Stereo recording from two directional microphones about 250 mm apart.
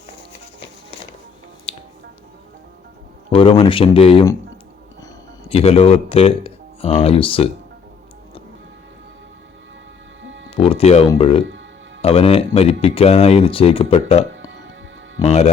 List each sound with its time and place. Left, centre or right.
1.7 s finger snapping: left
3.3 s speech: left
5.5 s speech: left
10.2 s music: right
10.5 s music: left
11.1 s speech: left
14.3 s music: right
15.2 s speech: left